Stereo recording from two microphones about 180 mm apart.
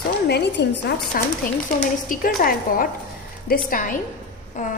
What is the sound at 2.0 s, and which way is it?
A woman's voice, 50° left (ahead or behind).